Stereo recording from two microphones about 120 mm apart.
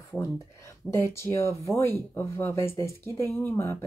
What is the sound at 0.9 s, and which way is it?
Speech, 20° left (ahead or behind).